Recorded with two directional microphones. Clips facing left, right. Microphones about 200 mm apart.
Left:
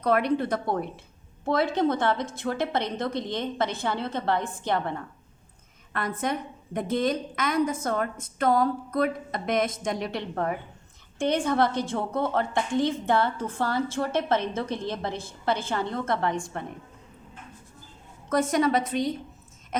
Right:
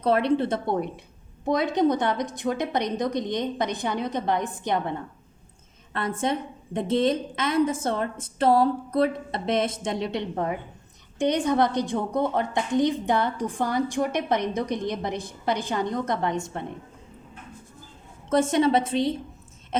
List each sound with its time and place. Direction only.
0.0 s a woman's voice: 25° right (ahead or behind)
18.3 s speech: 25° right (ahead or behind)